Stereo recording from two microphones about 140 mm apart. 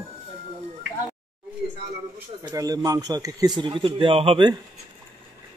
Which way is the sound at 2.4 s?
25° right (ahead or behind).